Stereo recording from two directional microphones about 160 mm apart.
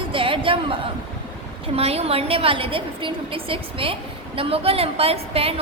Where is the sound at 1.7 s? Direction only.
40° right (ahead or behind).